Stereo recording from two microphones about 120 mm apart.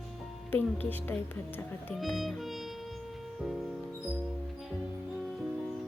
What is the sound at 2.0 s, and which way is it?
Speech, centre (ahead or behind).